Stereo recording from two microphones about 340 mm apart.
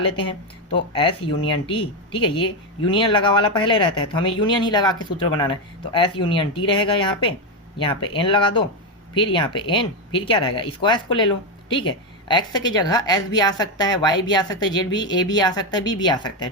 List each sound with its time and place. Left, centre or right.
0.2 s speech: centre